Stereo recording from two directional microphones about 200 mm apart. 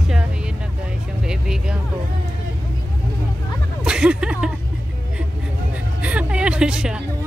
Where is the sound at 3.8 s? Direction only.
5° right (ahead or behind).